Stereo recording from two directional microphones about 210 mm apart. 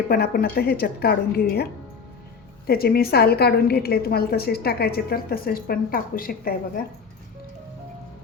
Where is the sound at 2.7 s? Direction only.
45° left (ahead or behind).